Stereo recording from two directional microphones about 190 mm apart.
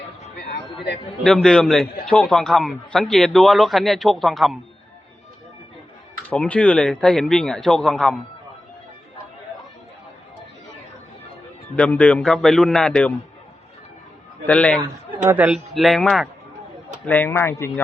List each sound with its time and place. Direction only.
0.3 s a sound: 60° left (ahead or behind)
1.2 s a man's voice: centre (ahead or behind)
6.2 s a man's voice: 5° left (ahead or behind)
11.8 s a man's voice: 10° left (ahead or behind)
14.4 s speech: 5° left (ahead or behind)
15.3 s a man's voice: 5° right (ahead or behind)
17.1 s speech: 10° left (ahead or behind)